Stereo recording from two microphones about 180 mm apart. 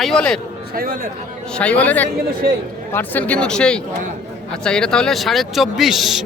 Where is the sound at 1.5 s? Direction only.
5° left (ahead or behind).